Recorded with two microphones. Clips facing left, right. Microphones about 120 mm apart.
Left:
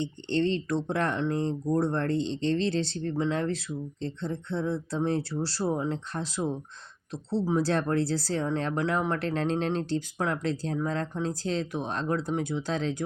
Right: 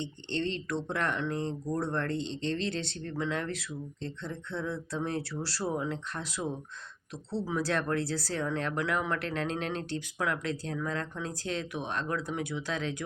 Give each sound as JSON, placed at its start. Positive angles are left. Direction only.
{"t": 0.3, "sound": "speech", "side_deg": 35}